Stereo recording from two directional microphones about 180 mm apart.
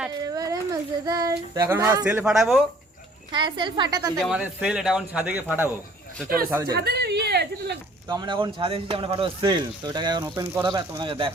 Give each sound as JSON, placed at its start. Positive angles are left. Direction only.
{"t": 0.2, "sound": "speech", "side_deg": -20}
{"t": 3.3, "sound": "speech", "side_deg": -25}
{"t": 4.2, "sound": "a man's voice", "side_deg": -5}
{"t": 6.7, "sound": "a sound", "side_deg": -60}
{"t": 8.0, "sound": "speech", "side_deg": -25}